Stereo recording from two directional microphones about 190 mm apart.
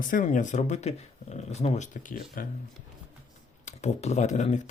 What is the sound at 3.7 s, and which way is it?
Speech, 35° left (ahead or behind).